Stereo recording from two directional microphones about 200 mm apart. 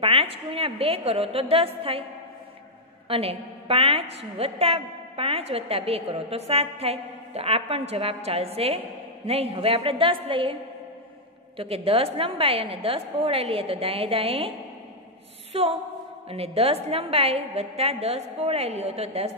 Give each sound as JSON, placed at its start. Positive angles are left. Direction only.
{"t": 0.0, "sound": "a woman's voice", "side_deg": -30}
{"t": 3.1, "sound": "a woman's voice", "side_deg": -30}
{"t": 15.5, "sound": "a sound", "side_deg": -30}
{"t": 16.3, "sound": "a woman's voice", "side_deg": -30}